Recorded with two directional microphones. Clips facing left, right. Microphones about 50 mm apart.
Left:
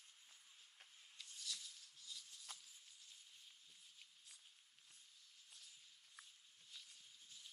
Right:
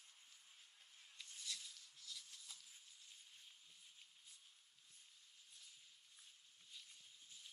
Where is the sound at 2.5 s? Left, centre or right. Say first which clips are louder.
Left 6 dB; left.